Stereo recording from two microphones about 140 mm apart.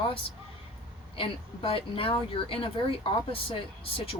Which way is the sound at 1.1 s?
40° left (ahead or behind).